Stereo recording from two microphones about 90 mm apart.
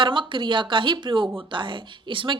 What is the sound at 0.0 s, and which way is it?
Speech, 65° right (ahead or behind).